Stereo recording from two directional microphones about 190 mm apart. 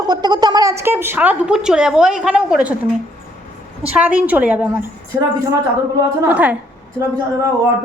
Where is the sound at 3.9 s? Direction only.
5° right (ahead or behind).